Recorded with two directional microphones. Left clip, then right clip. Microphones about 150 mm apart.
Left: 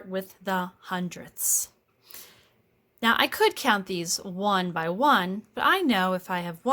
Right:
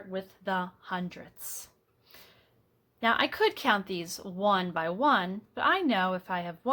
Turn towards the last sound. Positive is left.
turn(degrees=40)  # may be behind; listen again after turning